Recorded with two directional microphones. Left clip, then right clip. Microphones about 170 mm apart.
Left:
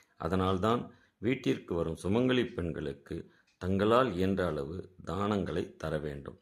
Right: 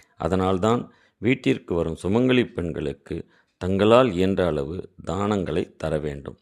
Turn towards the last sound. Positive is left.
turn(degrees=-40)  # may be behind; listen again after turning